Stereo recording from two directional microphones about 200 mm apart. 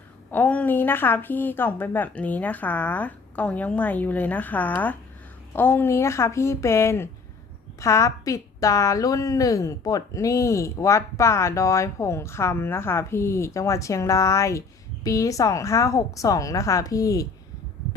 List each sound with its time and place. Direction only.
0.3 s a woman's voice: 10° left (ahead or behind)